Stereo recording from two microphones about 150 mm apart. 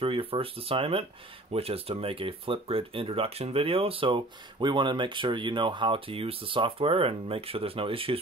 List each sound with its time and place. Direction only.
0.0 s speech: 35° right (ahead or behind)